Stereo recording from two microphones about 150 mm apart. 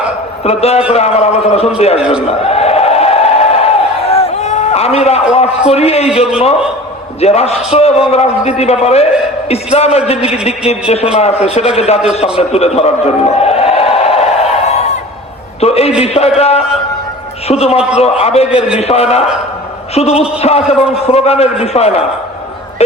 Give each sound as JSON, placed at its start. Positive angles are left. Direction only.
{"t": 0.4, "sound": "a man's voice", "side_deg": 45}
{"t": 2.0, "sound": "a man's voice", "side_deg": -5}
{"t": 2.4, "sound": "a sound", "side_deg": 45}
{"t": 5.3, "sound": "a man's voice", "side_deg": 45}
{"t": 7.2, "sound": "a man's voice", "side_deg": 45}
{"t": 15.6, "sound": "a man's voice", "side_deg": 45}